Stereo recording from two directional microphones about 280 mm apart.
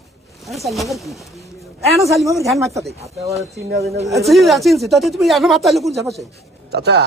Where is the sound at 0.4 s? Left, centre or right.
Centre.